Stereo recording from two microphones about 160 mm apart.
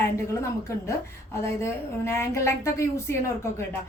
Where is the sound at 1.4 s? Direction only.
15° left (ahead or behind).